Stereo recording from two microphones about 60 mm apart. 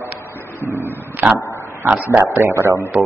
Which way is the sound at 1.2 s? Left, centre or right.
Right.